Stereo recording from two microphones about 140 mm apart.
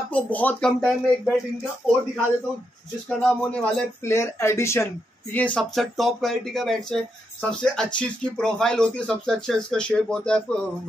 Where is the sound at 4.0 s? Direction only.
20° left (ahead or behind).